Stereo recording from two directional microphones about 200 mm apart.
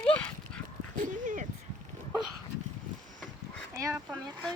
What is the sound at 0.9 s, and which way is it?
Dog, 40° right (ahead or behind).